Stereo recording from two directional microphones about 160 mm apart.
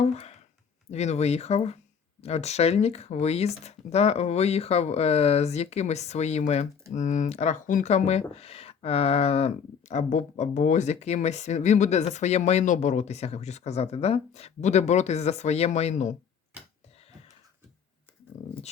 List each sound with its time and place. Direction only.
0.0 s speech: 40° left (ahead or behind)